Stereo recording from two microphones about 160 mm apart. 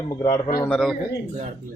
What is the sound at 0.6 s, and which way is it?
Speech, 5° left (ahead or behind).